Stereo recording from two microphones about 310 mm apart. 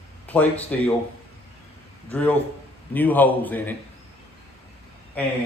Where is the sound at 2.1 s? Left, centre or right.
Centre.